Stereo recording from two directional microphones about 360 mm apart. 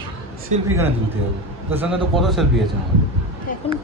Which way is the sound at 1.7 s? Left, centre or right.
Centre.